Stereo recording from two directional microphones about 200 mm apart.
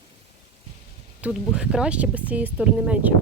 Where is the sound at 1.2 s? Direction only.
5° right (ahead or behind).